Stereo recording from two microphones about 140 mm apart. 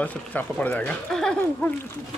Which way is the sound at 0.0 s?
10° left (ahead or behind).